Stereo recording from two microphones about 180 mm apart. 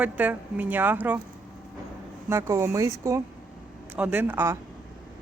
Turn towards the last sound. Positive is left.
turn(degrees=-10)  # may be behind; listen again after turning